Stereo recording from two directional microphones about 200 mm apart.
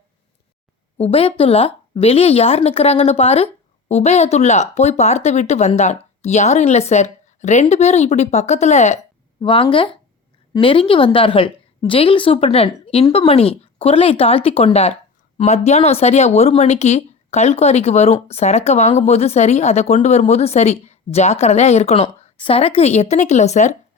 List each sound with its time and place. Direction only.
0.9 s a woman's voice: 30° left (ahead or behind)